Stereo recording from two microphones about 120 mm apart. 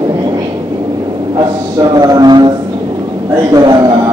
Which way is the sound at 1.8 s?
35° right (ahead or behind).